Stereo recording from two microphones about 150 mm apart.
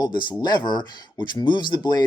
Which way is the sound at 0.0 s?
30° left (ahead or behind).